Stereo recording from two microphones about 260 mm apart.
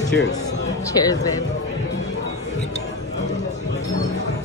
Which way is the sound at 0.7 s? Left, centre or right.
Centre.